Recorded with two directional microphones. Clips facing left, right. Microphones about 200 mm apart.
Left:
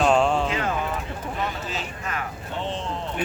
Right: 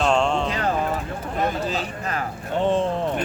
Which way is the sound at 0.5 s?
35° right (ahead or behind).